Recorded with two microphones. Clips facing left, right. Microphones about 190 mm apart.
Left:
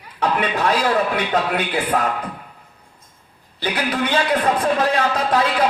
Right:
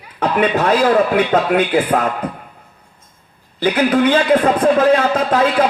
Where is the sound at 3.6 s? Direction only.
50° right (ahead or behind).